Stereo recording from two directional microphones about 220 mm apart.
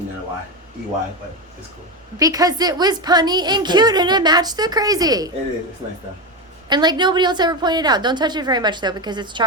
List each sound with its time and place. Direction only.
2.1 s a woman's voice: 15° right (ahead or behind)
6.7 s a woman's voice: 20° right (ahead or behind)